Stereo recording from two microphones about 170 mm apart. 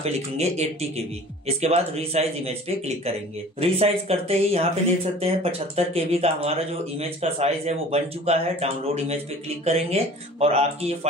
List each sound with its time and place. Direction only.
0.0 s speech: 40° right (ahead or behind)